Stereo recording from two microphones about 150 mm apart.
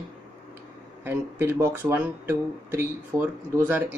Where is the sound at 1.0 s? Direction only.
15° right (ahead or behind).